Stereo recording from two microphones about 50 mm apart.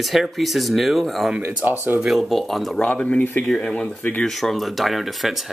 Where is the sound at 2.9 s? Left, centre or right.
Left.